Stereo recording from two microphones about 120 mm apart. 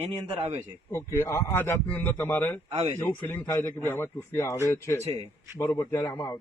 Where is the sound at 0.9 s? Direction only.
20° left (ahead or behind).